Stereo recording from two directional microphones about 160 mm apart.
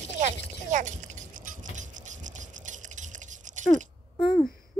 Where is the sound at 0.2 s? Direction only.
50° right (ahead or behind).